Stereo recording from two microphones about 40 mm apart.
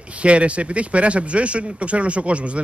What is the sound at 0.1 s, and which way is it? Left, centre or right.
Speech, right.